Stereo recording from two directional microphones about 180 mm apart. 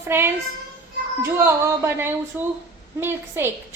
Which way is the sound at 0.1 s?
15° right (ahead or behind).